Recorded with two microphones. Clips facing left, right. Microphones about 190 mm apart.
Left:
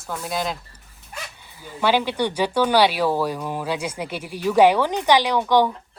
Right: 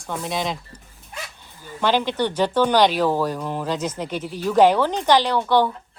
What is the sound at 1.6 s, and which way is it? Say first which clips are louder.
A woman's voice: even; 10° left (ahead or behind).